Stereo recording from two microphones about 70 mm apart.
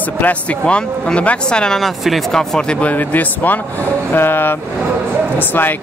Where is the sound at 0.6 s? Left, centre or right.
Centre.